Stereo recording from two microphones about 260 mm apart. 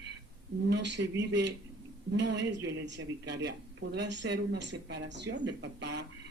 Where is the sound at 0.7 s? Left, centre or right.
Right.